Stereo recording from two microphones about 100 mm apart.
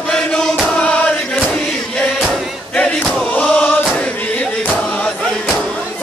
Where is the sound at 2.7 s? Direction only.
10° left (ahead or behind).